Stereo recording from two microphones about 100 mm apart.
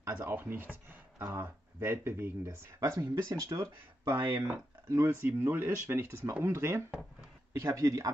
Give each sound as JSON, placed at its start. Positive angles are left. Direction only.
{"t": 0.0, "sound": "speech", "side_deg": -20}
{"t": 4.2, "sound": "speech", "side_deg": -50}
{"t": 4.8, "sound": "speech", "side_deg": -25}